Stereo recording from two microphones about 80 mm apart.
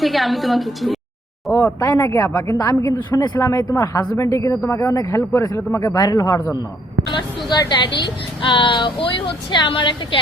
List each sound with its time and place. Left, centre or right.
0.0 s a woman's voice: centre
1.5 s speech: left
3.1 s speech: left
4.2 s speech: left
5.9 s speech: left
7.5 s a woman's voice: left